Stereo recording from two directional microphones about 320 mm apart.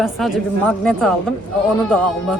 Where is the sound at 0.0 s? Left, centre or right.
Centre.